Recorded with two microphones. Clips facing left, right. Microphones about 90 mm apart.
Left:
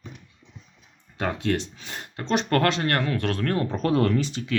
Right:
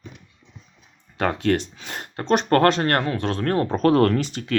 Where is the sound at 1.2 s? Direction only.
60° right (ahead or behind); by 3.1 s 45° right (ahead or behind).